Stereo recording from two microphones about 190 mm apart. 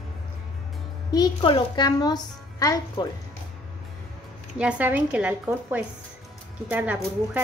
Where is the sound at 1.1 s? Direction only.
20° left (ahead or behind).